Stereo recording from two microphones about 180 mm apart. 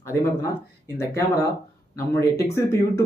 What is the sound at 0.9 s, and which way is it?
Speech, 15° left (ahead or behind).